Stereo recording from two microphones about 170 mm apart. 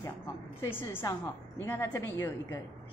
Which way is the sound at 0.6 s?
15° left (ahead or behind).